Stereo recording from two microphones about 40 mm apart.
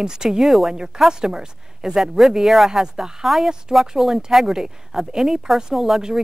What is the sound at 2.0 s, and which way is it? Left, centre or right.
Speech, centre.